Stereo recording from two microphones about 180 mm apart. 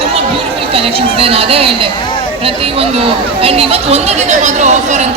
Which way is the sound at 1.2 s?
30° right (ahead or behind).